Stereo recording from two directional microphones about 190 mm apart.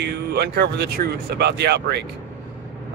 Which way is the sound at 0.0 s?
60° right (ahead or behind).